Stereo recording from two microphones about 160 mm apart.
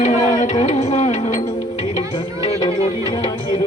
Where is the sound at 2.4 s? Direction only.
35° left (ahead or behind).